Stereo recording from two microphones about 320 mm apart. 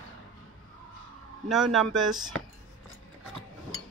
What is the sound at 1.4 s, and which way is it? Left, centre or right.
Speech, centre.